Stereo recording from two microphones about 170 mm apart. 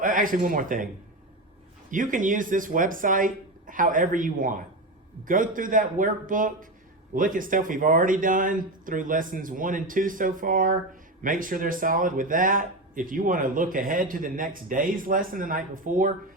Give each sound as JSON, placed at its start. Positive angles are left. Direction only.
{"t": 0.0, "sound": "speech", "side_deg": -55}
{"t": 1.9, "sound": "speech", "side_deg": -50}